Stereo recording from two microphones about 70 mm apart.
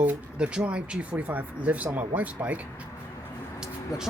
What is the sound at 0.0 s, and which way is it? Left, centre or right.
Speech, centre.